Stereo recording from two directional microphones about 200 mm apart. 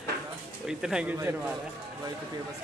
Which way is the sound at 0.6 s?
5° right (ahead or behind).